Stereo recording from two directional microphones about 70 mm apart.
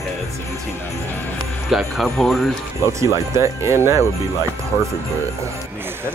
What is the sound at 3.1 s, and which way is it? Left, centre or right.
Speech, right.